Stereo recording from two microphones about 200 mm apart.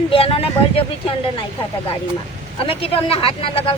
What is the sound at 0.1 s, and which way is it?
Speech, 30° left (ahead or behind).